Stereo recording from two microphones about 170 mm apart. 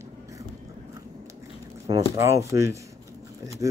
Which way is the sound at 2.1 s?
15° right (ahead or behind).